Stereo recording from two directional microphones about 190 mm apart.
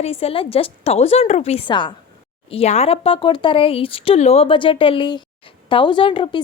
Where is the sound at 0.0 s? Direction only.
30° left (ahead or behind).